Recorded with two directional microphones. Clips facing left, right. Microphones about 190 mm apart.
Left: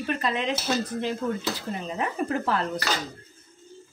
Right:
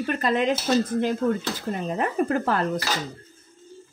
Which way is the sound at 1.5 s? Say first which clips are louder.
Right 4 dB; 50° right (ahead or behind).